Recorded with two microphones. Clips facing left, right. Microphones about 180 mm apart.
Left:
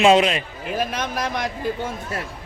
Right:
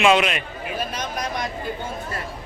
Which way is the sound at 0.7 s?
55° left (ahead or behind).